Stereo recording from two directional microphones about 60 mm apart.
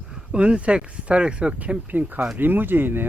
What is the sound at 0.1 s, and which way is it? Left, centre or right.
Speech, centre.